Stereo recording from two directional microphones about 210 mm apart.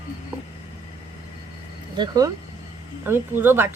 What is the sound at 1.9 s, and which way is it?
Speech, 20° right (ahead or behind).